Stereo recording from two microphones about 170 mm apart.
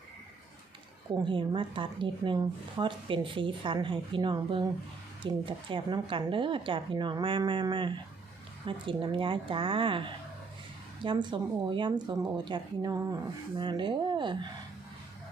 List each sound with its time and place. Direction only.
1.2 s speech: 30° right (ahead or behind)